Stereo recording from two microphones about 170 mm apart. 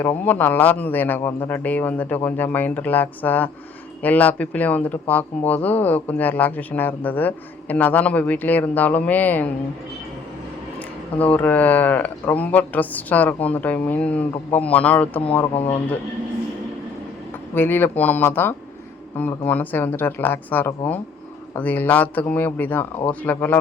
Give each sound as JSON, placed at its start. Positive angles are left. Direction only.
{"t": 0.0, "sound": "speech", "side_deg": 10}
{"t": 11.2, "sound": "speech", "side_deg": 10}
{"t": 15.5, "sound": "speech", "side_deg": 40}
{"t": 17.5, "sound": "speech", "side_deg": 10}